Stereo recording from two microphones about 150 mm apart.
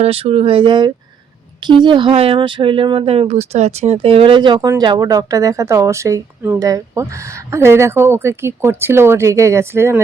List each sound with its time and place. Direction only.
0.0 s speech: 40° right (ahead or behind); by 10.0 s 15° right (ahead or behind)